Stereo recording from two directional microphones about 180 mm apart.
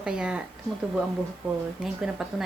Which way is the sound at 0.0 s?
5° right (ahead or behind).